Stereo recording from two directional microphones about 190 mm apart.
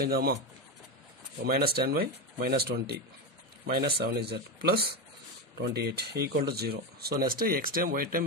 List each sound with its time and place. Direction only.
0.0 s speech: 55° right (ahead or behind)
1.4 s speech: 55° right (ahead or behind)